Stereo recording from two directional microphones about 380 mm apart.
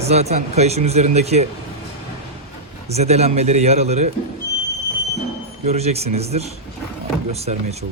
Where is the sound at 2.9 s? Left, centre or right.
Centre.